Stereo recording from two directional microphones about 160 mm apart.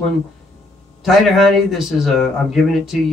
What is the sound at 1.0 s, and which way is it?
A man's voice, centre (ahead or behind).